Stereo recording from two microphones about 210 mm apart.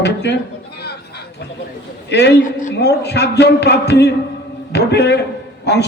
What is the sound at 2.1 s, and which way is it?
A man's voice, 55° left (ahead or behind).